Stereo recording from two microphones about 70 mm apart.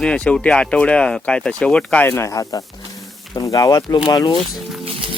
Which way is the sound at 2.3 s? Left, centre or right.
Left.